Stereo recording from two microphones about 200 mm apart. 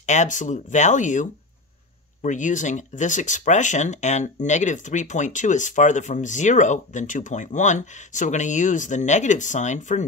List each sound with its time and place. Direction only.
0.0 s speech: 35° left (ahead or behind)